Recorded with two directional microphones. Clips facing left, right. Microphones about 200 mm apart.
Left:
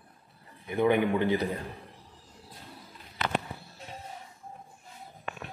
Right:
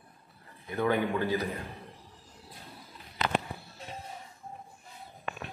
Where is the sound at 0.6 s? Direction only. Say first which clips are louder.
Left 4 dB; 15° left (ahead or behind).